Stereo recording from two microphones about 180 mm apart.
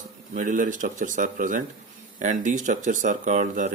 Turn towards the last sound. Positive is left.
turn(degrees=-40)  # may be behind; listen again after turning